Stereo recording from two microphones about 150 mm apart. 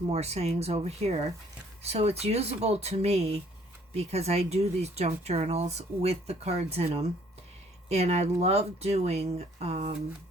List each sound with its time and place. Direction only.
0.1 s speech: 45° right (ahead or behind)